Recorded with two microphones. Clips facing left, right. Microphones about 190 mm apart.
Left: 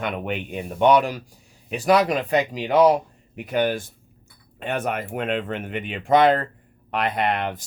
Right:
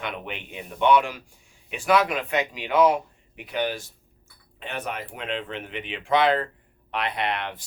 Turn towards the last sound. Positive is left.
turn(degrees=45)  # may be behind; listen again after turning